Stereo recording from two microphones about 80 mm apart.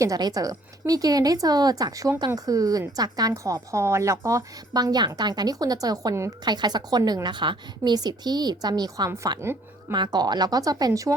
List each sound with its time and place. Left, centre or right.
0.2 s a woman's voice: right
6.4 s a woman's voice: right
9.0 s a woman's voice: right
9.9 s a woman's voice: right